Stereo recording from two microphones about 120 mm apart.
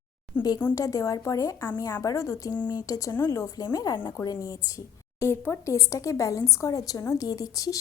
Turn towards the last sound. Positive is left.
turn(degrees=30)  # may be behind; listen again after turning